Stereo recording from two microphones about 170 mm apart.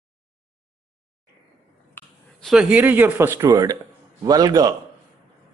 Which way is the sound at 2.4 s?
5° right (ahead or behind).